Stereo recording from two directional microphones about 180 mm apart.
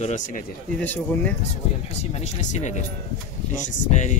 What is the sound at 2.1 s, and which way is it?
Speech, 40° left (ahead or behind).